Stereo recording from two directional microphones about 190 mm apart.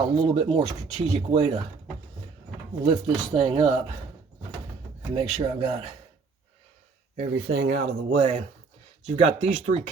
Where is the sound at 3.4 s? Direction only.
30° right (ahead or behind).